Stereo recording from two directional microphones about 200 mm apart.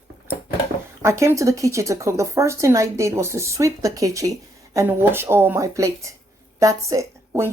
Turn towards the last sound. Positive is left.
turn(degrees=-15)  # may be behind; listen again after turning